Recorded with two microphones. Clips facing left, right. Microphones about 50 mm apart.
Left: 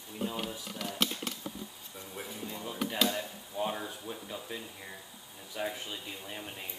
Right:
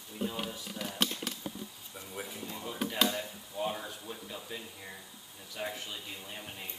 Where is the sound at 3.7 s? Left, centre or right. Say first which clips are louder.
Left 2 dB; centre.